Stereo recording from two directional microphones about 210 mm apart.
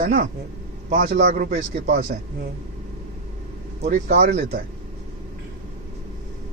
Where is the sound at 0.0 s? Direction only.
40° right (ahead or behind).